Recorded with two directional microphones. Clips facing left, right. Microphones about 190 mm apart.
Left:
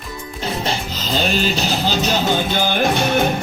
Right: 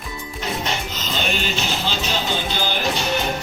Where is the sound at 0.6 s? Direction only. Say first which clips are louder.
Left 3 dB; 35° left (ahead or behind).